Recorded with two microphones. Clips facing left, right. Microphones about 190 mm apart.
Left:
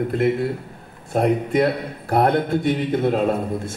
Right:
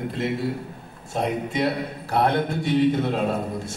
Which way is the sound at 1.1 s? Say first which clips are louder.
Left 7 dB; 50° left (ahead or behind).